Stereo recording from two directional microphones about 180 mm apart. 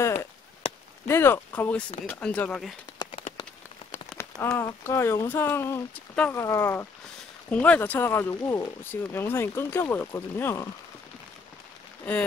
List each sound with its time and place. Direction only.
0.0 s chop: 15° left (ahead or behind)
0.6 s a sound: 35° left (ahead or behind)
1.0 s speech: 15° left (ahead or behind)
4.2 s speech: 15° left (ahead or behind)
12.0 s speech: 10° left (ahead or behind)